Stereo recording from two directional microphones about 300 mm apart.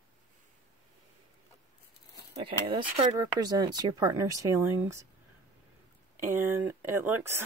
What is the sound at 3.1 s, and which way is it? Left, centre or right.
Speech, centre.